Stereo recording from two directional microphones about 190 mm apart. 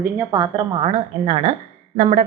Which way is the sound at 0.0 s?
15° right (ahead or behind).